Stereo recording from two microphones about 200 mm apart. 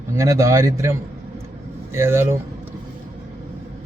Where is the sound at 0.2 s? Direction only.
15° right (ahead or behind).